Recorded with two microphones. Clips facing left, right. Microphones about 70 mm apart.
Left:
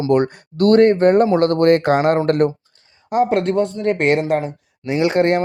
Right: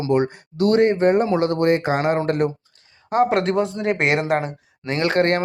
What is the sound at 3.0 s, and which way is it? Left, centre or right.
Speech, right.